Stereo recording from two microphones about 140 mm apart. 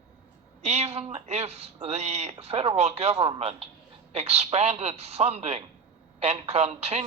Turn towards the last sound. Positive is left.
turn(degrees=-50)  # may be behind; listen again after turning